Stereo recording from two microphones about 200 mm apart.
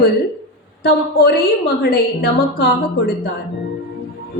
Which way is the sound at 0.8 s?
55° left (ahead or behind).